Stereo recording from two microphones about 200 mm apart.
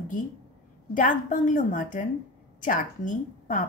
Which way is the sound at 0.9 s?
40° left (ahead or behind).